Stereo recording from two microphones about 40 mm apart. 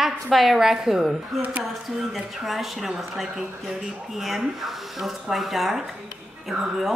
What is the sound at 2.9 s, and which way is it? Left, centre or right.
Speech, centre.